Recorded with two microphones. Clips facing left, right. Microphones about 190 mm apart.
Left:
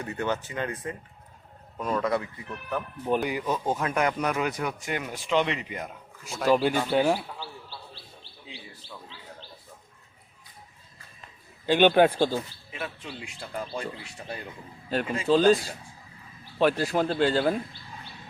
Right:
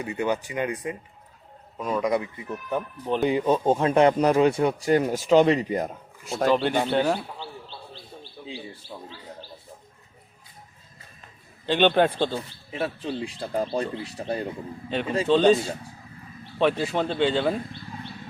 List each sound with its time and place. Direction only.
0.0 s speech: 10° right (ahead or behind); by 6.5 s 40° right (ahead or behind)
6.5 s a man's voice: 5° left (ahead or behind)
7.3 s bird: 20° right (ahead or behind)
11.6 s a man's voice: 10° left (ahead or behind)
12.3 s speech: 35° right (ahead or behind)
15.3 s speech: 5° left (ahead or behind)
16.6 s speech: 5° left (ahead or behind)